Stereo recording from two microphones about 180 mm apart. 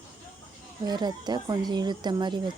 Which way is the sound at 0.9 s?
25° right (ahead or behind).